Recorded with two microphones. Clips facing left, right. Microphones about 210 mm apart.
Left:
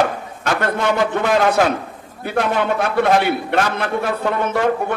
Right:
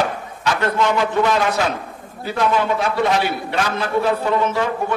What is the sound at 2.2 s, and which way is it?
A man's voice, 60° left (ahead or behind).